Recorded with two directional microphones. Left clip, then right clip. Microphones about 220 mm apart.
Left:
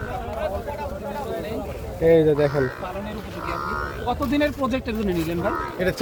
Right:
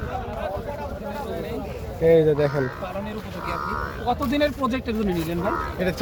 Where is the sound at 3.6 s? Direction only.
50° left (ahead or behind).